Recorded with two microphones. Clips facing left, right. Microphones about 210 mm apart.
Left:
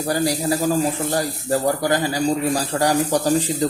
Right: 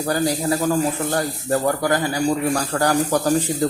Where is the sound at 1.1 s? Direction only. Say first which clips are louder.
Even; 25° left (ahead or behind).